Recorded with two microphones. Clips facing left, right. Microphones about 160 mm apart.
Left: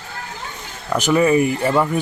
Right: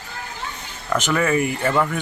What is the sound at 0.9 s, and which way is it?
Speech, 15° left (ahead or behind).